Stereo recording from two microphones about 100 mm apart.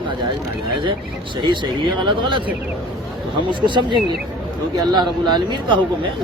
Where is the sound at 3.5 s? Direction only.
50° right (ahead or behind).